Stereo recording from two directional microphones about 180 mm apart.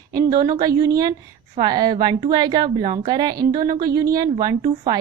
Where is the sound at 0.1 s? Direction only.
20° right (ahead or behind).